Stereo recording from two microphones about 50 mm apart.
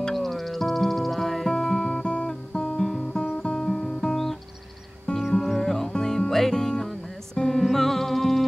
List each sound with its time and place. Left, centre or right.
0.0 s music: centre
5.1 s music: centre
5.6 s music: centre